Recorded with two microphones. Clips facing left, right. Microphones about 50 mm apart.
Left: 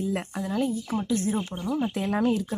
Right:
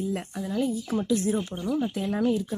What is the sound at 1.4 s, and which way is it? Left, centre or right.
Speech, centre.